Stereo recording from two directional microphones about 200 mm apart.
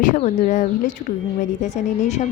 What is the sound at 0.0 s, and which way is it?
A woman's voice, 40° left (ahead or behind).